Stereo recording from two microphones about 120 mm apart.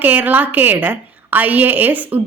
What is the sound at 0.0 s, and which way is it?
A woman's voice, 15° right (ahead or behind).